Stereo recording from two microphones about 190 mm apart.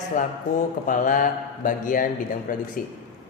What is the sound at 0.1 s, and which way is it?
Speech, 40° left (ahead or behind).